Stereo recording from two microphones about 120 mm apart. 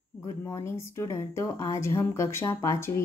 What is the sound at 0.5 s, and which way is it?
Speech, 25° left (ahead or behind).